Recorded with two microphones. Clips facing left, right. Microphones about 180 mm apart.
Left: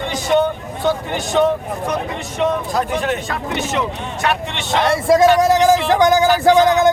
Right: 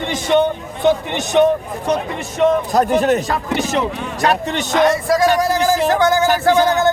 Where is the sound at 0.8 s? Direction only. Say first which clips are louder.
Right 4 dB; 20° right (ahead or behind).